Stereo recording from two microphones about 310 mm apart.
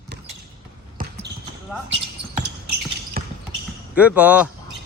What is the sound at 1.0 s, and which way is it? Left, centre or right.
Basketball bounce, right.